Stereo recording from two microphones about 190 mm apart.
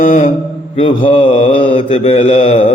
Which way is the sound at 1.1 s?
30° left (ahead or behind).